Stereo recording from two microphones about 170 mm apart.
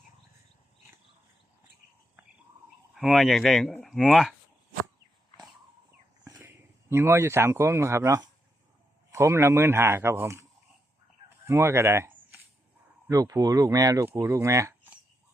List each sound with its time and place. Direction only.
2.9 s speech: centre (ahead or behind)
6.9 s speech: 15° right (ahead or behind)
11.4 s speech: 15° right (ahead or behind)